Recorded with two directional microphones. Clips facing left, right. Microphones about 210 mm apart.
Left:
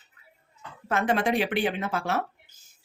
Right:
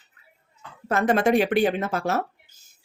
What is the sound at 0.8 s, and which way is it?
Speech, 40° right (ahead or behind).